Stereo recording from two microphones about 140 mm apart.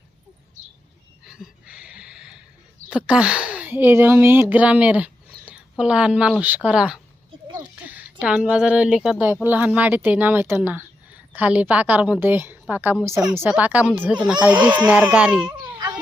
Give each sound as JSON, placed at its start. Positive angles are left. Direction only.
{"t": 1.2, "sound": "a sound", "side_deg": -5}
{"t": 2.9, "sound": "a woman's voice", "side_deg": -10}
{"t": 7.6, "sound": "a sound", "side_deg": -10}
{"t": 8.2, "sound": "a woman's voice", "side_deg": -5}
{"t": 14.5, "sound": "speech", "side_deg": -30}
{"t": 15.1, "sound": "a woman's voice", "side_deg": -5}